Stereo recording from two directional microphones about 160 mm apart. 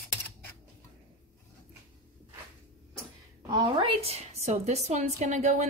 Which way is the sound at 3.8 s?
40° right (ahead or behind).